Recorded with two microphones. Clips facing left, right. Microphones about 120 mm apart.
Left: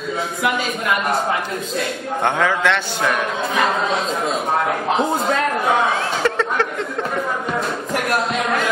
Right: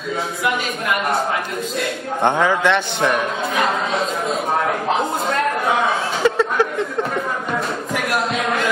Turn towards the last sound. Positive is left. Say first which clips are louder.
# right 2 dB
turn(degrees=-10)  # may be behind; listen again after turning